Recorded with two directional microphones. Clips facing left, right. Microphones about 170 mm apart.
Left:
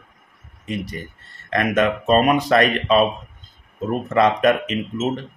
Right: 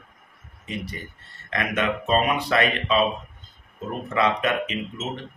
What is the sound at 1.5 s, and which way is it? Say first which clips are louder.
Speech: left 6 dB; 45° left (ahead or behind).